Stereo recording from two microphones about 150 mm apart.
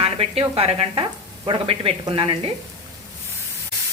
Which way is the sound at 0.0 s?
40° right (ahead or behind).